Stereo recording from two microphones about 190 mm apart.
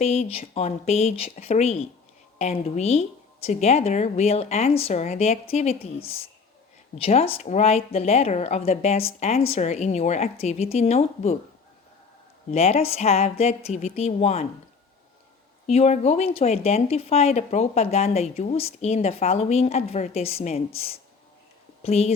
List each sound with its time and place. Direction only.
0.0 s speech: 35° left (ahead or behind)
12.5 s speech: 35° left (ahead or behind)
15.6 s speech: 35° left (ahead or behind)